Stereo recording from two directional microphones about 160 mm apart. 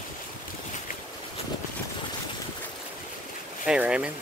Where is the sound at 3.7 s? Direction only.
5° right (ahead or behind).